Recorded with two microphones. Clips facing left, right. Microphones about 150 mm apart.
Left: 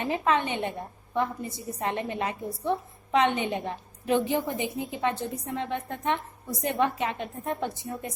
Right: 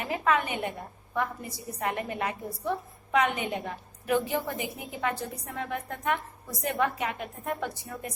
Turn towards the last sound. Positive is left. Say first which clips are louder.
# left 2 dB
turn(degrees=25)  # may be behind; listen again after turning